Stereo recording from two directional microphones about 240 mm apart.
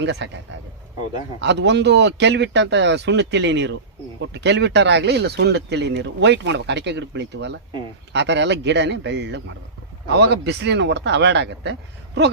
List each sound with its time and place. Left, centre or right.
0.0 s speech: right